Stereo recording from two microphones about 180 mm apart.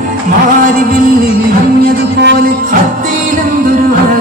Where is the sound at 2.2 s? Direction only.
70° right (ahead or behind).